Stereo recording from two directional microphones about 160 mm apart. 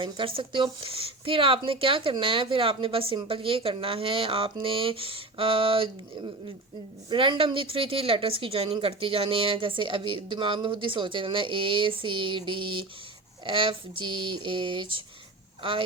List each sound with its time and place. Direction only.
0.0 s speech: 35° right (ahead or behind)